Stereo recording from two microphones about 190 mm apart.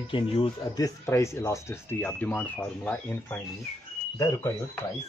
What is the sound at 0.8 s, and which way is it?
Speech, 15° left (ahead or behind).